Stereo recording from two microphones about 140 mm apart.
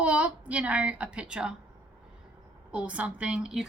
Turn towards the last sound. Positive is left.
turn(degrees=-5)  # may be behind; listen again after turning